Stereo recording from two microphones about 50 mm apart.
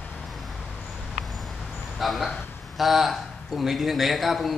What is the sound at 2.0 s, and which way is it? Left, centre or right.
A man's voice, centre.